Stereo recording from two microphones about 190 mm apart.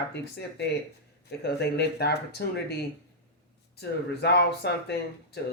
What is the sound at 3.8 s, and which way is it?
Speech, 60° left (ahead or behind).